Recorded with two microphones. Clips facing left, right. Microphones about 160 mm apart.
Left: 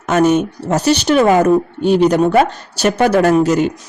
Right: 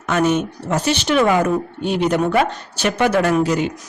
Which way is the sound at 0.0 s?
40° left (ahead or behind).